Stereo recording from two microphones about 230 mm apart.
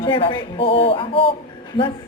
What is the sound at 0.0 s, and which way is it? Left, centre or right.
A woman's voice, left.